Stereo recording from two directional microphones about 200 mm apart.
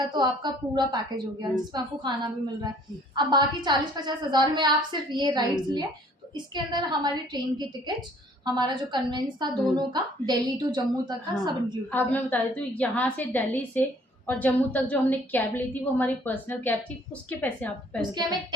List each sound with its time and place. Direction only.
0.1 s a woman's voice: 20° right (ahead or behind)
3.2 s a woman's voice: 20° right (ahead or behind)
11.9 s a woman's voice: 10° left (ahead or behind)
18.0 s a woman's voice: 20° right (ahead or behind)